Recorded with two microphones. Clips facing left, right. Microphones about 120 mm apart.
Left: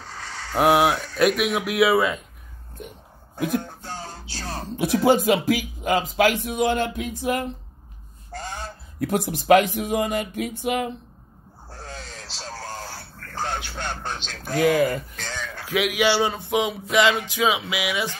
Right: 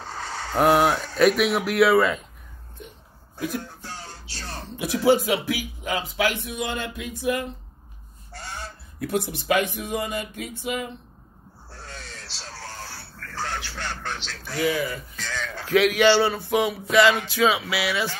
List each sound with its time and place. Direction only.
0.6 s speech: 10° left (ahead or behind)
3.3 s speech: 55° left (ahead or behind)
8.3 s honk: 45° left (ahead or behind)
9.1 s speech: 50° left (ahead or behind)
11.7 s a sound: 45° left (ahead or behind)
13.8 s a sound: 20° left (ahead or behind)
14.4 s speech: 50° left (ahead or behind)
15.6 s speech: 10° left (ahead or behind)